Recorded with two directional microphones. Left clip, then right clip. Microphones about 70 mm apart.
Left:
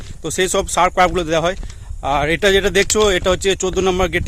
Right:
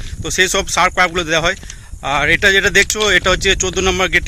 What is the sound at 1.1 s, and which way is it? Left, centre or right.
Speech, left.